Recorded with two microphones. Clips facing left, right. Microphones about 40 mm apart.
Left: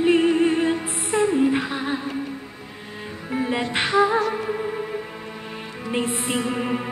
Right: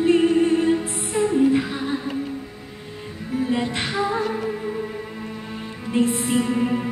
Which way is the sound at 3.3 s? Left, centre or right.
Left.